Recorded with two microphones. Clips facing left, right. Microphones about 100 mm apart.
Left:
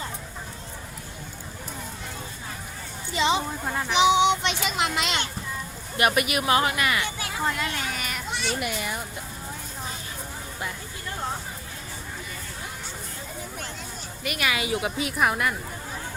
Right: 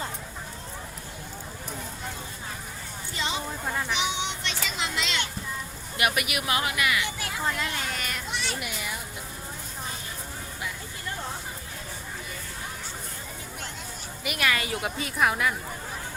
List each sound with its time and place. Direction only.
3.2 s a sound: 90° left
3.7 s a woman's voice: 5° left (ahead or behind)
3.9 s a child's voice: 90° left; by 5.2 s 55° left (ahead or behind)
6.0 s speech: 35° left (ahead or behind)
7.4 s speech: 5° left (ahead or behind)
8.6 s speech: 50° left (ahead or behind)
14.3 s a woman's voice: centre (ahead or behind)